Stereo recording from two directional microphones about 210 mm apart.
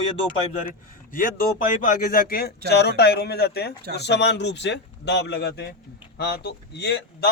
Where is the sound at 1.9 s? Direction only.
40° left (ahead or behind).